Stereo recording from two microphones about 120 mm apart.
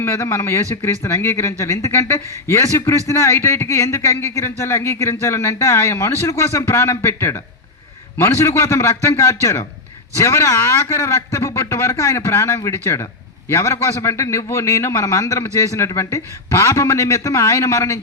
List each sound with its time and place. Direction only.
0.0 s a man's voice: 25° left (ahead or behind)